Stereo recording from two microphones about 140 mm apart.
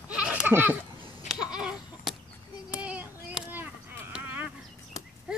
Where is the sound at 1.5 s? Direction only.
5° right (ahead or behind).